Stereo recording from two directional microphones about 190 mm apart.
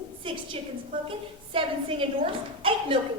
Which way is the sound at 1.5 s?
30° right (ahead or behind).